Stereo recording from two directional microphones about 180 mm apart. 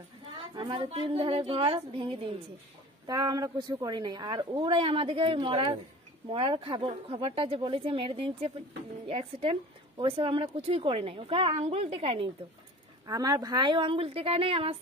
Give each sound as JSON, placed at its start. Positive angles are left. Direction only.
{"t": 0.6, "sound": "speech", "side_deg": -30}
{"t": 13.0, "sound": "speech", "side_deg": -20}